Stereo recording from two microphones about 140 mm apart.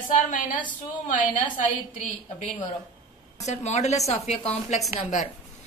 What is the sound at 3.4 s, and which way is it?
A woman's voice, 55° left (ahead or behind).